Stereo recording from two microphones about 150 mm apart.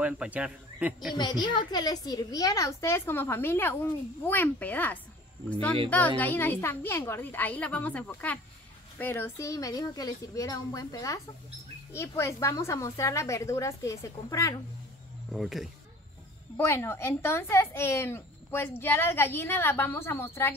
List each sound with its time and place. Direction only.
0.0 s a man's voice: 5° right (ahead or behind)
1.1 s a woman's voice: 30° left (ahead or behind)
15.3 s speech: centre (ahead or behind)
16.5 s speech: 15° left (ahead or behind)